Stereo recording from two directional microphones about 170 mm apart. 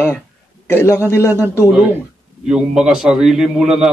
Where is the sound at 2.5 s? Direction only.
5° right (ahead or behind).